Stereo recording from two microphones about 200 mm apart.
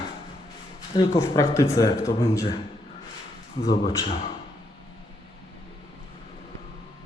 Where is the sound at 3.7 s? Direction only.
20° left (ahead or behind).